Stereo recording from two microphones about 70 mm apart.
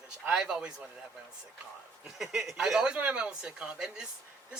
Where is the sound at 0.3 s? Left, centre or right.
Centre.